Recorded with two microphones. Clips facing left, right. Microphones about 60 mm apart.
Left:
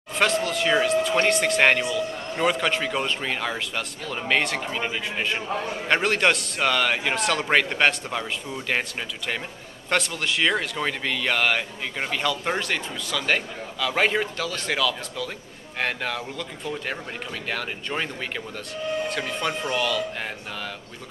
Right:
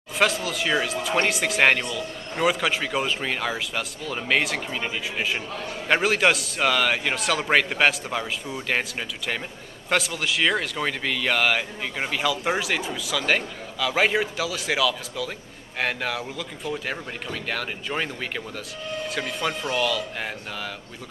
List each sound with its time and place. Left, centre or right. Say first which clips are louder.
0.1 s a man's voice: left 1 dB; centre
5.5 s a man's voice: left 4 dB; left
5.9 s a man's voice: right 1 dB; centre